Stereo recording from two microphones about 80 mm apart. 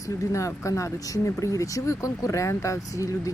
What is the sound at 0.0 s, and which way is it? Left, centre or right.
Speech, left.